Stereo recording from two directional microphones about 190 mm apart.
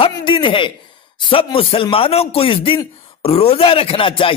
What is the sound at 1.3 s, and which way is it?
A man's voice, 30° left (ahead or behind).